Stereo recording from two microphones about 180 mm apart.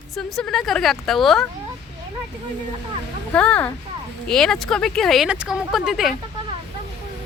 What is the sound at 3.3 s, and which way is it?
Speech, 5° left (ahead or behind).